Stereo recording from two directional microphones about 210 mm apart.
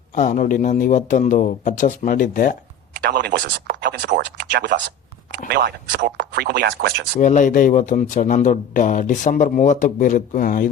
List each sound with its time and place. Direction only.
0.1 s a man's voice: 40° left (ahead or behind)
3.0 s speech: 50° right (ahead or behind)
7.2 s a man's voice: 35° left (ahead or behind)